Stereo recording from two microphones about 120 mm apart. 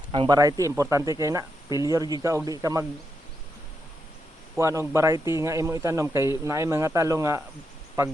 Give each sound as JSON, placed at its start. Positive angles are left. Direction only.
{"t": 0.3, "sound": "speech", "side_deg": -30}
{"t": 4.5, "sound": "speech", "side_deg": -25}